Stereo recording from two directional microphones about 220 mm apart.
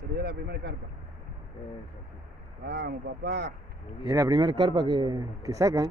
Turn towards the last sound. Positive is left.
turn(degrees=-15)  # may be behind; listen again after turning